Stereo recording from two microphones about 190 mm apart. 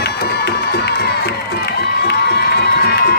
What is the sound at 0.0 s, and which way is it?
Crowd, 60° left (ahead or behind).